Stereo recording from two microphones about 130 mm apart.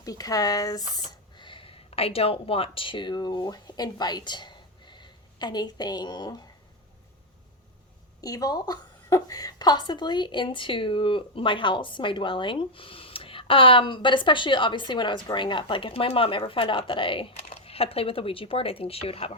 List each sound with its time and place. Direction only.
0.0 s speech: 25° left (ahead or behind)
8.2 s a woman's voice: 30° left (ahead or behind); by 19.3 s 50° left (ahead or behind)